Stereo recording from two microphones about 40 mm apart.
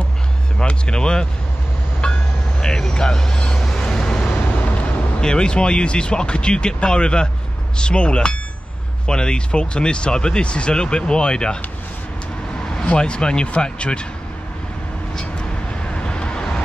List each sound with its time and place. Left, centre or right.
0.6 s speech: left
2.0 s train: left
2.6 s vehicle: centre
5.2 s speech: left
12.6 s speech: left
15.9 s vehicle: left